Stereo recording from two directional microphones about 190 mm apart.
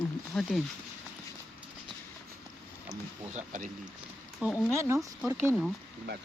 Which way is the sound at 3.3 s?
45° right (ahead or behind).